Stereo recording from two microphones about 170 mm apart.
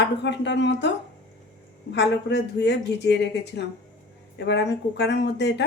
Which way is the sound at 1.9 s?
90° left.